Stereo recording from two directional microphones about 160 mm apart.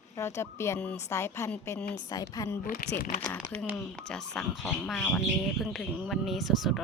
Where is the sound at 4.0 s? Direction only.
5° left (ahead or behind).